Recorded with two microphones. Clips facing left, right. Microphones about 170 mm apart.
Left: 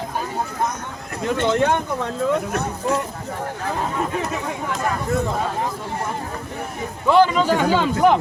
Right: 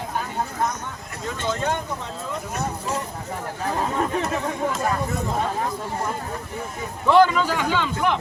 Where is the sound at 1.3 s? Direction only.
65° left (ahead or behind).